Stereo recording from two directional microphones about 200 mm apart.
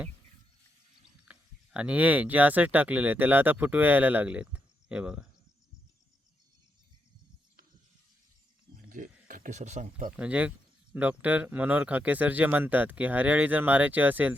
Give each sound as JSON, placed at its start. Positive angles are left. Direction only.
{"t": 1.3, "sound": "speech", "side_deg": -5}
{"t": 8.7, "sound": "wild animals", "side_deg": -40}
{"t": 10.2, "sound": "speech", "side_deg": -5}